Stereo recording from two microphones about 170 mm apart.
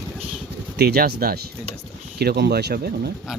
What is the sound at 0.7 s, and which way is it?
Speech, 65° right (ahead or behind).